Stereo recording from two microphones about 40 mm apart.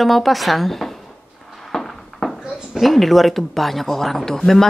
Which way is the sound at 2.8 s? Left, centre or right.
Centre.